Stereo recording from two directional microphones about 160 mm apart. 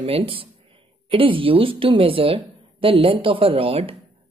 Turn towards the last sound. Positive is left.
turn(degrees=-35)  # may be behind; listen again after turning